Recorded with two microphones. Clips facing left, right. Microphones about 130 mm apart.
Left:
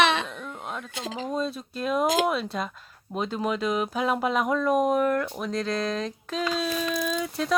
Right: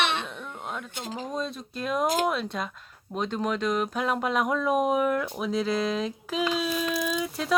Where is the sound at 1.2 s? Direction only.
Centre (ahead or behind).